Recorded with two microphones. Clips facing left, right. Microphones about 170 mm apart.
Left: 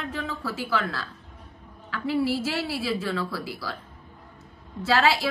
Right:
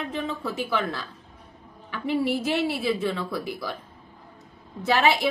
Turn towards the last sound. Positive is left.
turn(degrees=-20)  # may be behind; listen again after turning